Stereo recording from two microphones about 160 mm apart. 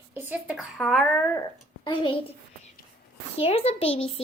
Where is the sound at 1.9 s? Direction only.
30° left (ahead or behind).